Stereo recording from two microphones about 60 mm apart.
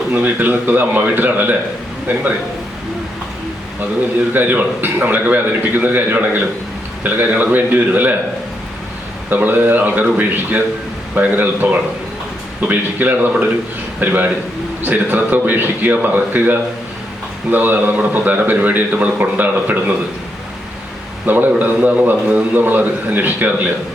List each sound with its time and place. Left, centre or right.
0.1 s a man's voice: right
4.4 s a man's voice: right
9.3 s a man's voice: right
21.2 s a man's voice: right